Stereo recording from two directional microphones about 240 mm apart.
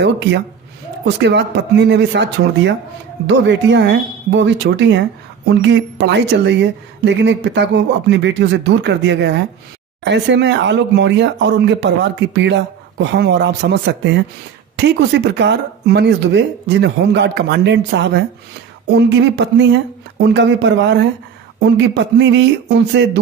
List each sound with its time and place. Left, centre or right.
0.0 s a woman's voice: right